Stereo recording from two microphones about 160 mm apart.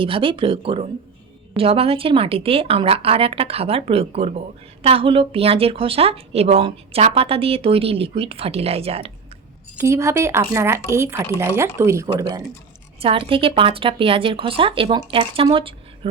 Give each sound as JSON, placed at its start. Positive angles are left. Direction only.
{"t": 0.0, "sound": "a woman's voice", "side_deg": -35}
{"t": 9.8, "sound": "speech", "side_deg": -20}
{"t": 12.0, "sound": "a woman's voice", "side_deg": -30}